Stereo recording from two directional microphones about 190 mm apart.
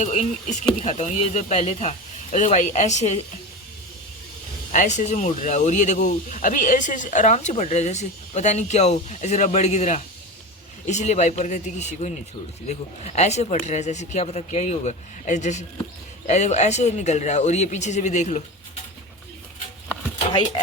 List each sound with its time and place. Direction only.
0.0 s speech: 40° left (ahead or behind)
4.7 s speech: 40° left (ahead or behind)
13.1 s speech: 35° left (ahead or behind)
20.1 s a sound: 25° left (ahead or behind)